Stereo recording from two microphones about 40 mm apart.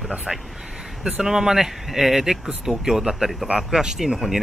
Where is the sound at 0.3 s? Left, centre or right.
Centre.